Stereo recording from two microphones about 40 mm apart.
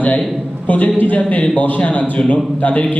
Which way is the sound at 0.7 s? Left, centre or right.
Left.